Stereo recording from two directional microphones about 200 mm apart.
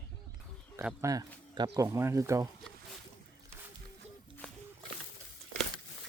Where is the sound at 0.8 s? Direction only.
15° right (ahead or behind).